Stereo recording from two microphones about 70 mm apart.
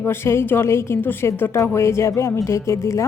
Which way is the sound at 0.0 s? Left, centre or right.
Left.